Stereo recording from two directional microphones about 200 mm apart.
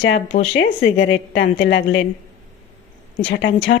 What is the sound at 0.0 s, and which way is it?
Speech, 65° left (ahead or behind).